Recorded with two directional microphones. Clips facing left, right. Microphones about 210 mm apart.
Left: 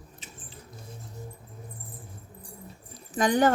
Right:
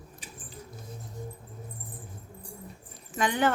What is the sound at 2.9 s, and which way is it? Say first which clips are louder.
Keys jangling: left 5 dB; 40° left (ahead or behind).